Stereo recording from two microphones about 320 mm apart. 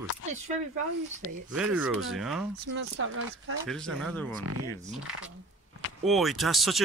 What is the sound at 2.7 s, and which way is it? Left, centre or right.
Speech, right.